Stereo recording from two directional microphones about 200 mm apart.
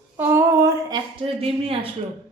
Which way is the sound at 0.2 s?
10° right (ahead or behind).